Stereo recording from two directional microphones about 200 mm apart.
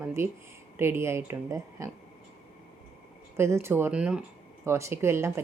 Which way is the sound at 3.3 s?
10° right (ahead or behind).